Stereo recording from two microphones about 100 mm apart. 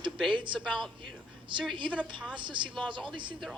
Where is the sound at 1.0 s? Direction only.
55° right (ahead or behind).